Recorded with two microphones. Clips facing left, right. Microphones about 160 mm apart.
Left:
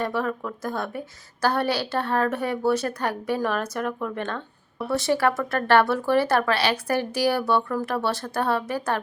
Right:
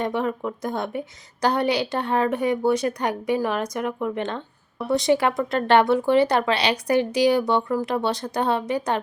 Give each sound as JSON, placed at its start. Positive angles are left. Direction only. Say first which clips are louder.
{"t": 0.0, "sound": "a woman's voice", "louder": "right 2 dB", "side_deg": -20}